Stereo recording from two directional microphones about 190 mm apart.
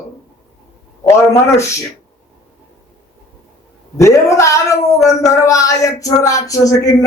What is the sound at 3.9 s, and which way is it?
Speech, 15° left (ahead or behind).